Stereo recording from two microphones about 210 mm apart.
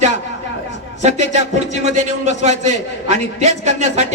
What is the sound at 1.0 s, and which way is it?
A man's voice, 35° right (ahead or behind).